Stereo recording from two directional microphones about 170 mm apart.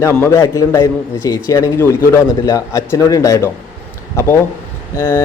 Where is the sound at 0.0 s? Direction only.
15° left (ahead or behind).